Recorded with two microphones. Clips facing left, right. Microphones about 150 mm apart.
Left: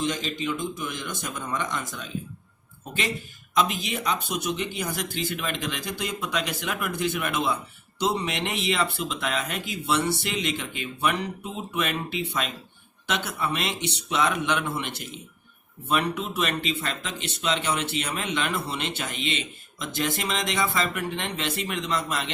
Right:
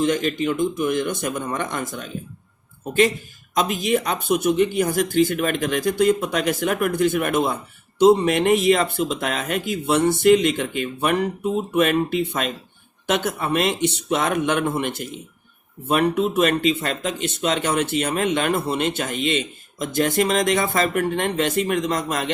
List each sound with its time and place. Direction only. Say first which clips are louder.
0.0 s a man's voice: right 8 dB; 55° right (ahead or behind)
3.5 s speech: right 5 dB; 45° right (ahead or behind)